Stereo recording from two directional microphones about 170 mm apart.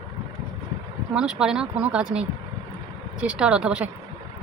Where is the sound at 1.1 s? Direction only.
5° right (ahead or behind).